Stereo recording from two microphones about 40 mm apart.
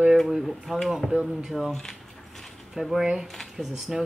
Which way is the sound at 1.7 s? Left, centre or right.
Centre.